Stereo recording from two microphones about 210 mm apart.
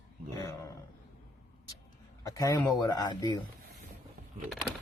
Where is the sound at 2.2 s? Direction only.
15° left (ahead or behind).